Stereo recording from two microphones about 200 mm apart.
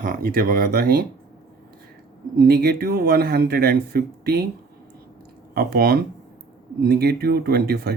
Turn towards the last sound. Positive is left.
turn(degrees=-50)  # may be behind; listen again after turning